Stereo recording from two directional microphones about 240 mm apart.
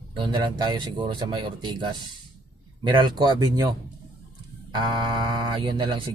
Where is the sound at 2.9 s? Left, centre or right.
Centre.